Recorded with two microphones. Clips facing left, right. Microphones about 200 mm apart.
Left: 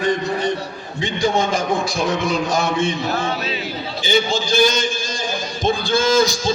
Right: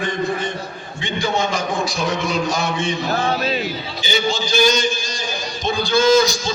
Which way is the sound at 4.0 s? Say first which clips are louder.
Left 3 dB; 50° left (ahead or behind).